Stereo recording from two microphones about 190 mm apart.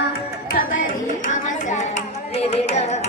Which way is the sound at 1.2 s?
40° left (ahead or behind).